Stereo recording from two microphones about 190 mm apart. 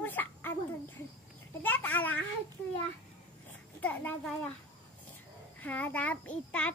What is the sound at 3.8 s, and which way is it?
Speech, 10° left (ahead or behind).